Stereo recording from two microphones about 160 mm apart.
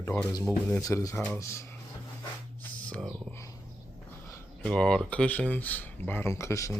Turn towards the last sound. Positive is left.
turn(degrees=20)  # may be behind; listen again after turning